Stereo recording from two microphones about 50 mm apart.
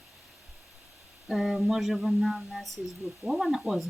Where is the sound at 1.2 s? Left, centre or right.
Centre.